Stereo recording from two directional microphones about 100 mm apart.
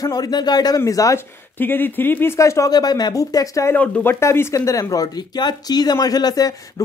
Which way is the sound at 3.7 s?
20° left (ahead or behind).